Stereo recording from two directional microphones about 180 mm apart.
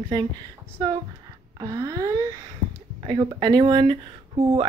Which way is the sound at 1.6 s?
20° right (ahead or behind).